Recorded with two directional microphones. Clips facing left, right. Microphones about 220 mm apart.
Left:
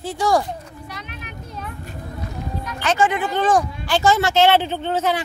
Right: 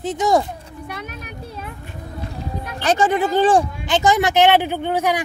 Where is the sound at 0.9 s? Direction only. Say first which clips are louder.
Right 7 dB; 55° right (ahead or behind).